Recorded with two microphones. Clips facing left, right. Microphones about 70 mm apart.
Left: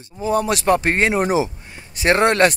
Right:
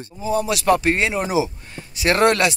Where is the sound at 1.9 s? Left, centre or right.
Left.